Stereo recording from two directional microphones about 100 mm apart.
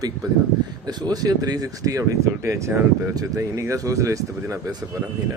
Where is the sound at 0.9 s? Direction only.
40° right (ahead or behind).